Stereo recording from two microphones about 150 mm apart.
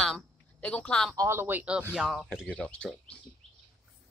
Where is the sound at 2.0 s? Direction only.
Centre (ahead or behind).